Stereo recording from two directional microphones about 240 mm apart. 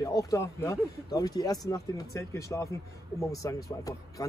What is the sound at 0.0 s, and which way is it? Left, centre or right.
Speech, centre.